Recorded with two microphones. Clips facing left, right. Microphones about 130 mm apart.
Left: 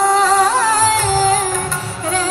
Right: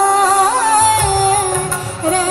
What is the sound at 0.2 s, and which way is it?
Music, 40° right (ahead or behind).